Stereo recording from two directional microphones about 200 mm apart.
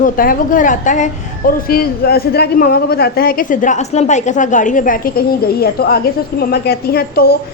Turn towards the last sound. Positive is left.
turn(degrees=50)  # may be behind; listen again after turning